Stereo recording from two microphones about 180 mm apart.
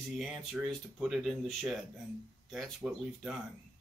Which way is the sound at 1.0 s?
Centre (ahead or behind).